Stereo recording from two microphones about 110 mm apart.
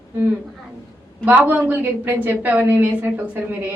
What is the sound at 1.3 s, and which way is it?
A woman's voice, 15° right (ahead or behind).